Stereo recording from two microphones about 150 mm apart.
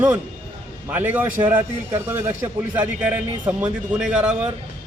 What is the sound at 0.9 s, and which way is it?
A man's voice, 10° right (ahead or behind).